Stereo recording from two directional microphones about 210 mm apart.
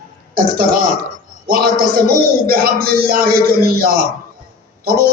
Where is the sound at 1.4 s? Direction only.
45° right (ahead or behind).